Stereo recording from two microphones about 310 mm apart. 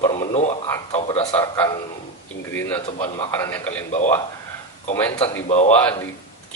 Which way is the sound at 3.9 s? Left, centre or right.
Left.